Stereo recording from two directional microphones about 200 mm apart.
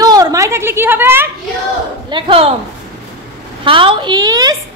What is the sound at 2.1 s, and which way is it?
Speech, 25° right (ahead or behind).